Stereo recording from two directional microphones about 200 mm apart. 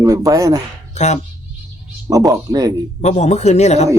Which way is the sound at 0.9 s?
35° left (ahead or behind).